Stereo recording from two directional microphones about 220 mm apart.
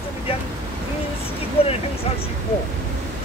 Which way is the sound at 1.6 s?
25° left (ahead or behind).